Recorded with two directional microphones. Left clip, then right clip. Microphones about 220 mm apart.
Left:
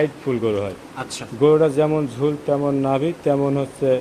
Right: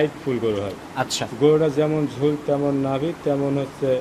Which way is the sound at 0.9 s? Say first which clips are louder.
Right 6 dB; 20° right (ahead or behind).